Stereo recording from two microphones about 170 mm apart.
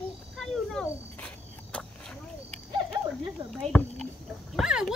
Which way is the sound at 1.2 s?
5° left (ahead or behind).